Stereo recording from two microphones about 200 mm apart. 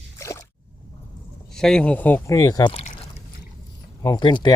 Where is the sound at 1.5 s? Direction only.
Centre (ahead or behind); by 2.9 s 30° left (ahead or behind).